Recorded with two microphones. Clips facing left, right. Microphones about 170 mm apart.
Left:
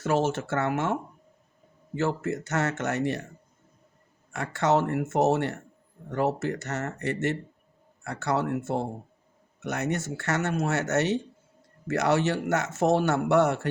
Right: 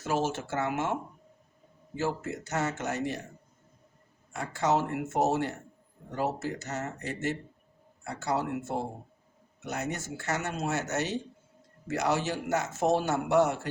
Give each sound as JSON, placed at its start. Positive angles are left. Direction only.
{"t": 0.0, "sound": "speech", "side_deg": 65}
{"t": 2.0, "sound": "speech", "side_deg": 65}
{"t": 4.3, "sound": "speech", "side_deg": 70}
{"t": 8.0, "sound": "speech", "side_deg": 80}
{"t": 9.6, "sound": "speech", "side_deg": 70}